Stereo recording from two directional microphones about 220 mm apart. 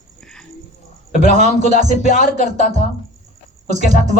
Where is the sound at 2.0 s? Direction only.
40° left (ahead or behind).